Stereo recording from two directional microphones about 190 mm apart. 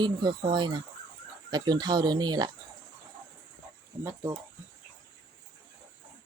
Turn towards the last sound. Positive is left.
turn(degrees=-15)  # may be behind; listen again after turning